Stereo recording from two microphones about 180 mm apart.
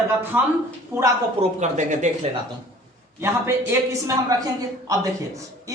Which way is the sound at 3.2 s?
15° right (ahead or behind).